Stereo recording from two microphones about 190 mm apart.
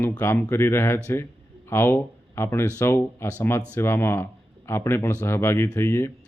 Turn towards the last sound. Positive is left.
turn(degrees=15)  # may be behind; listen again after turning